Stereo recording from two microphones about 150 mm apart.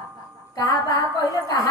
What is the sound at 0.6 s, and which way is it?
A woman's voice, 25° left (ahead or behind).